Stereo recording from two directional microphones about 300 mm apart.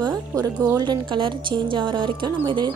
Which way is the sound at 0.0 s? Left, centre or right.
Centre.